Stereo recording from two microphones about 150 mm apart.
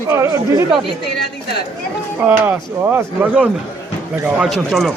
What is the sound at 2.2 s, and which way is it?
A man's voice, 15° right (ahead or behind).